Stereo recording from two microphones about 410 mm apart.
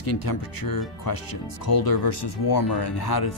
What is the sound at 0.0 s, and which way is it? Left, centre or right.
Speech, left.